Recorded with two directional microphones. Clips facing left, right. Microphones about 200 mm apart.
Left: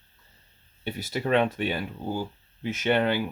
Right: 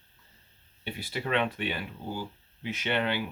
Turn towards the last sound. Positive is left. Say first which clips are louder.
# left 6 dB
turn(degrees=45)  # may be behind; listen again after turning